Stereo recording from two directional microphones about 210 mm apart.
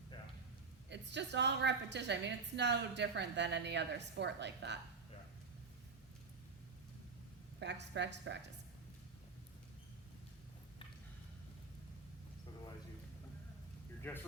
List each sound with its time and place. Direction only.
0.9 s a woman's voice: 55° right (ahead or behind)
7.6 s a woman's voice: 55° right (ahead or behind)
14.0 s speech: 10° left (ahead or behind)